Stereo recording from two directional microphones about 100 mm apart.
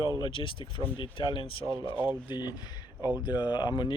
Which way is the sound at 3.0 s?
15° right (ahead or behind).